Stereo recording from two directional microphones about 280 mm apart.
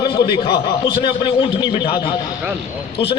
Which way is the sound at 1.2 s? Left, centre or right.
Centre.